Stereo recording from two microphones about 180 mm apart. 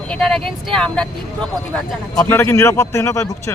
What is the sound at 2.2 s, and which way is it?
A man's voice, 15° left (ahead or behind).